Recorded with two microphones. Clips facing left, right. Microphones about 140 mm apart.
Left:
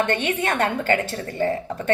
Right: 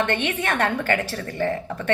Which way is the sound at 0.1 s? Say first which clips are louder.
Left 1 dB; 25° left (ahead or behind).